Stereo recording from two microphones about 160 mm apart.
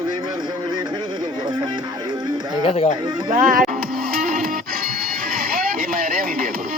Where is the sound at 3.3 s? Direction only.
55° right (ahead or behind).